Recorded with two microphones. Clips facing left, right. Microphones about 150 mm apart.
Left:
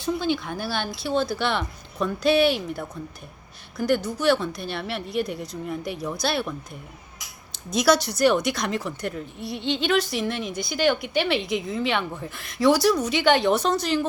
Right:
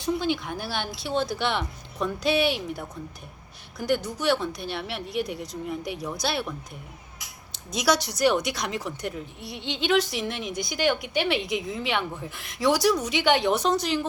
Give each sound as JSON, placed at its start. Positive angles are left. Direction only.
{"t": 0.0, "sound": "a woman's voice", "side_deg": -15}
{"t": 3.8, "sound": "a woman's voice", "side_deg": -15}
{"t": 7.5, "sound": "a woman's voice", "side_deg": -15}